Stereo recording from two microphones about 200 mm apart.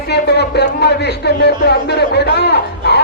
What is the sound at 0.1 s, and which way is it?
Speech, 55° left (ahead or behind).